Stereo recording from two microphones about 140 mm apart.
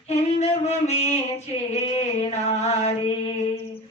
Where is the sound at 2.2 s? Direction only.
50° left (ahead or behind).